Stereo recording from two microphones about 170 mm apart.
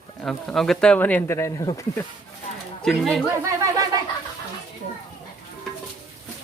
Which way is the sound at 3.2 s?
20° right (ahead or behind).